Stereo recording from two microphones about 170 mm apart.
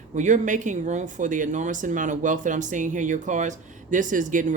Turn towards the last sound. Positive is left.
turn(degrees=-50)  # may be behind; listen again after turning